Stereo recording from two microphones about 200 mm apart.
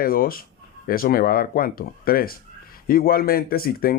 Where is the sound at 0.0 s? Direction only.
45° left (ahead or behind).